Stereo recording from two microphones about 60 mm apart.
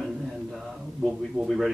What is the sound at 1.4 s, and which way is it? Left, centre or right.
Speech, centre.